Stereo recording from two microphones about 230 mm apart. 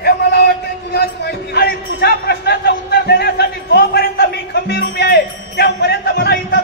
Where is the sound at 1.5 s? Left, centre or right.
Left.